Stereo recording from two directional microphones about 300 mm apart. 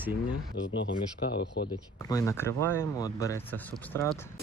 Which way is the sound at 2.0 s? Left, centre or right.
Centre.